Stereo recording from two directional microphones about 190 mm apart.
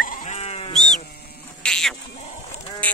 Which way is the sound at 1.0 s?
55° left (ahead or behind).